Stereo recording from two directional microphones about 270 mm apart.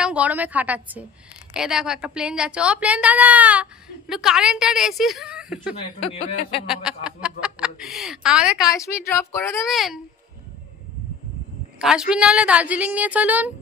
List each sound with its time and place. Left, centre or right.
0.0 s a woman's voice: centre
6.1 s speech: left
6.7 s a woman's voice: centre
8.6 s a woman's voice: centre
11.8 s a woman's voice: centre